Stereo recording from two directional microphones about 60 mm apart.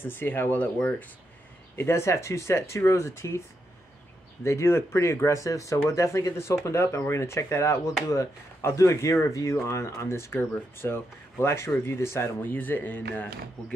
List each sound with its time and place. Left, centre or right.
0.0 s speech: left
1.8 s speech: left